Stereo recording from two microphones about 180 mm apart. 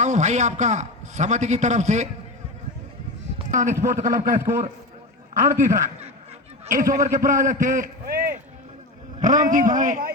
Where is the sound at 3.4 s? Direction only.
45° right (ahead or behind).